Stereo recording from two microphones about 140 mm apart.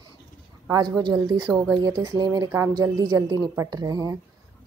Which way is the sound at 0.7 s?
30° right (ahead or behind).